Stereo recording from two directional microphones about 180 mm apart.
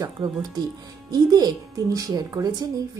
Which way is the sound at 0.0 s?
20° right (ahead or behind).